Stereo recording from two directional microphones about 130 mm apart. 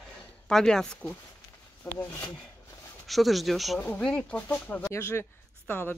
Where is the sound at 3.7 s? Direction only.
10° left (ahead or behind).